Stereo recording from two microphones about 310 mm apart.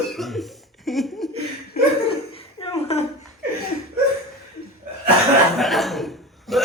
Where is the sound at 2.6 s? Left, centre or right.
Centre.